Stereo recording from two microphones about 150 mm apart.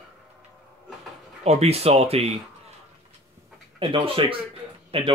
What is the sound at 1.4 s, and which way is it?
Speech, 45° right (ahead or behind).